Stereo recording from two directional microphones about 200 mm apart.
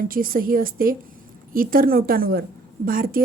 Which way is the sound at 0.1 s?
45° right (ahead or behind).